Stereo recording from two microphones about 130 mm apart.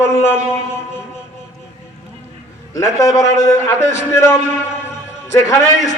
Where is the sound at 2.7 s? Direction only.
25° left (ahead or behind).